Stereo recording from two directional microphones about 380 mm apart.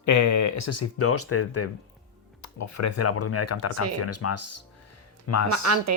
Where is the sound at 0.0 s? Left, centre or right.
Left.